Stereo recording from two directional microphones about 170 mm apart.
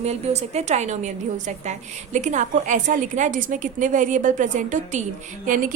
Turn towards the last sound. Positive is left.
turn(degrees=-55)  # may be behind; listen again after turning